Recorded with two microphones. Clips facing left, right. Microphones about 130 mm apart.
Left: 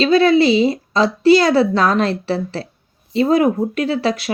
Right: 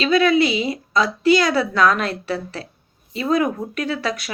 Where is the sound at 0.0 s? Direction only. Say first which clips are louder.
Left 4 dB; 30° left (ahead or behind).